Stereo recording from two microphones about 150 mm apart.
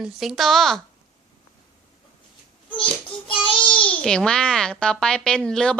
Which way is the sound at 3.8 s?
5° left (ahead or behind).